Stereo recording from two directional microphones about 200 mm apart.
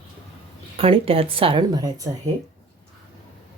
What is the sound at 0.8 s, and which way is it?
Speech, 30° right (ahead or behind).